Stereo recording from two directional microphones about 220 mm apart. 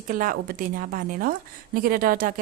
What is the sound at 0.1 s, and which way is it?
Speech, 40° right (ahead or behind).